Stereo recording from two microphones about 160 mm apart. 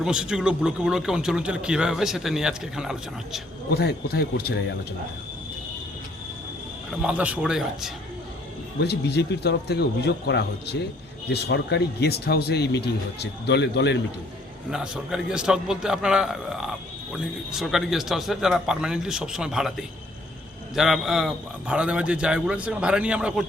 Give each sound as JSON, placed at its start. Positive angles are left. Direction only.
{"t": 0.0, "sound": "a man's voice", "side_deg": -5}
{"t": 3.7, "sound": "speech", "side_deg": 80}
{"t": 7.0, "sound": "a man's voice", "side_deg": -10}
{"t": 8.8, "sound": "speech", "side_deg": 90}
{"t": 14.7, "sound": "a man's voice", "side_deg": -5}